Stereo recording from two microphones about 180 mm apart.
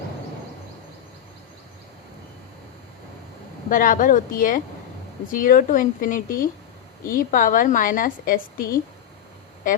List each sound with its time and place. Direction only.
3.7 s a woman's voice: 50° left (ahead or behind)